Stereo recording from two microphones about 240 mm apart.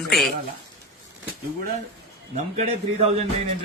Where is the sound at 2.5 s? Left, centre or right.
Right.